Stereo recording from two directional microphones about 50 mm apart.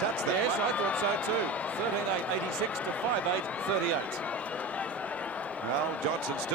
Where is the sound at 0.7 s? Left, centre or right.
Left.